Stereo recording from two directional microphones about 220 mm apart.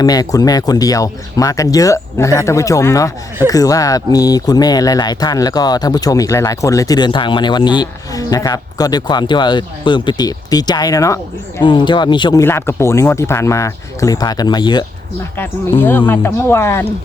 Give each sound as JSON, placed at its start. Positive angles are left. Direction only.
{"t": 0.0, "sound": "speech", "side_deg": 15}